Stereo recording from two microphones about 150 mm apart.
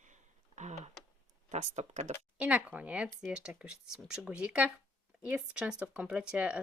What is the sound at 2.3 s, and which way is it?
Speech, 10° right (ahead or behind).